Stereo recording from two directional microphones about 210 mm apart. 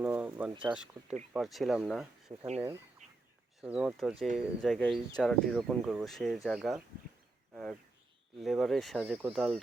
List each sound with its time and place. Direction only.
0.0 s speech: 5° right (ahead or behind)
3.0 s a sound: 35° right (ahead or behind)
3.6 s speech: 5° right (ahead or behind)